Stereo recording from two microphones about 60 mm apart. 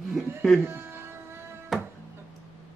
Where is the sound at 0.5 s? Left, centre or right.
Right.